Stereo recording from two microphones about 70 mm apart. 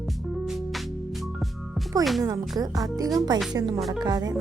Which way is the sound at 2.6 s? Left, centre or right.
Right.